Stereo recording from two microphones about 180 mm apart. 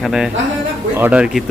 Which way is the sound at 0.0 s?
Centre (ahead or behind).